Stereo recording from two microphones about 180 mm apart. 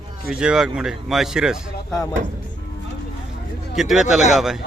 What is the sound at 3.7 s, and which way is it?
Speech, centre (ahead or behind).